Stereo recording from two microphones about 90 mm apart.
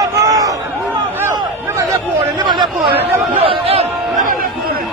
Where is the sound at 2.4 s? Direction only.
60° right (ahead or behind).